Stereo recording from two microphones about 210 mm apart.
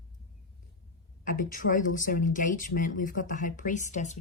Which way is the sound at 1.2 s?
40° left (ahead or behind).